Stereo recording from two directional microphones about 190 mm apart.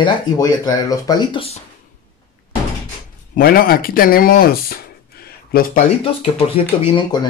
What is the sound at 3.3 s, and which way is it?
Speech, 50° left (ahead or behind).